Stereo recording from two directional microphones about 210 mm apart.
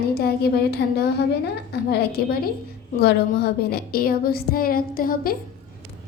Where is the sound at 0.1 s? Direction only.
50° left (ahead or behind).